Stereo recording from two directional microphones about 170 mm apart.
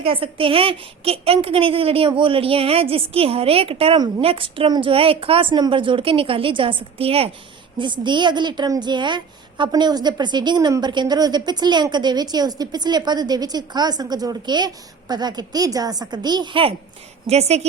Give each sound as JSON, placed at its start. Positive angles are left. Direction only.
{"t": 0.0, "sound": "a woman's voice", "side_deg": -30}